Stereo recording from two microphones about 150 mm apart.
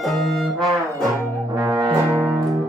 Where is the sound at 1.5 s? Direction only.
25° right (ahead or behind).